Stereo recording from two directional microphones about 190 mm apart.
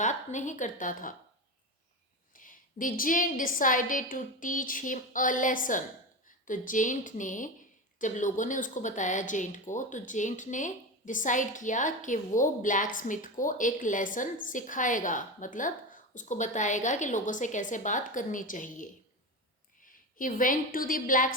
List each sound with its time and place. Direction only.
0.0 s speech: 40° left (ahead or behind)
2.3 s a woman's voice: 45° left (ahead or behind)